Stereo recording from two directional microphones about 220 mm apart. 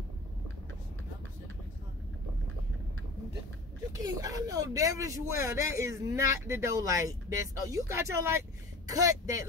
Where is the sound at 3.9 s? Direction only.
15° right (ahead or behind).